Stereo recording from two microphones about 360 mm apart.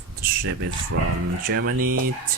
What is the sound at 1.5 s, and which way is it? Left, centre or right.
Speech, right.